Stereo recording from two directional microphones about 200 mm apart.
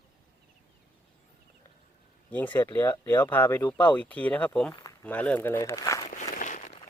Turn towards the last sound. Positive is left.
turn(degrees=40)  # may be behind; listen again after turning